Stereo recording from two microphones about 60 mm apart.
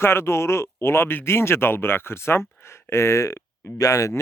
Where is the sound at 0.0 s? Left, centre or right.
Left.